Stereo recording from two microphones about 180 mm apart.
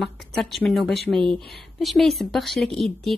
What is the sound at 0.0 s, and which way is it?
Speech, centre (ahead or behind).